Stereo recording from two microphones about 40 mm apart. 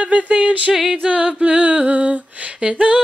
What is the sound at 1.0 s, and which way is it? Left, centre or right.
Female singing, right.